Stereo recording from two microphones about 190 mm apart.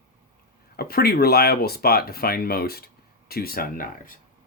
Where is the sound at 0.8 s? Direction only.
55° left (ahead or behind).